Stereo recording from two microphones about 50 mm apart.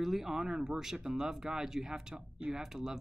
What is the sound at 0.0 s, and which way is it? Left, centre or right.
Speech, centre.